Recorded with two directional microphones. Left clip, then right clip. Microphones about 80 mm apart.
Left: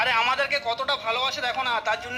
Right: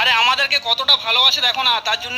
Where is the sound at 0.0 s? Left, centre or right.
Centre.